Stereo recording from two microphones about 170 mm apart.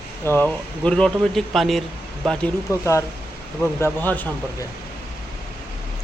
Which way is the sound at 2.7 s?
15° left (ahead or behind).